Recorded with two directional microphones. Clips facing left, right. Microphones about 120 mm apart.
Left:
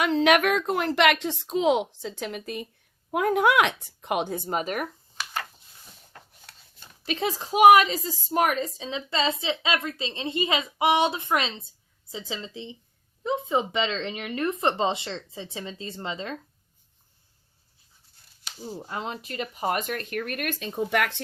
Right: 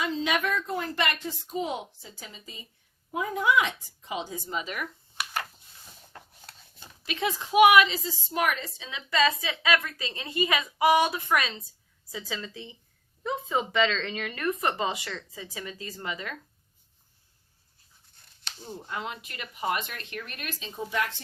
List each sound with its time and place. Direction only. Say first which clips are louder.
0.0 s a woman's voice: left 7 dB; 70° left (ahead or behind); by 4.9 s 45° left (ahead or behind)
7.0 s a woman's voice: left 2 dB; 35° left (ahead or behind)
18.9 s speech: left 1 dB; 35° left (ahead or behind); by 21.2 s 70° left (ahead or behind)